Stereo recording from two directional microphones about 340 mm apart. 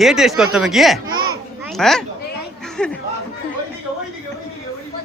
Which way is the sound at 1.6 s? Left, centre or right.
Centre.